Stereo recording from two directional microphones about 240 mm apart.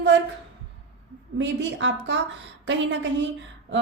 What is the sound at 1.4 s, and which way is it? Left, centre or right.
A woman's voice, right.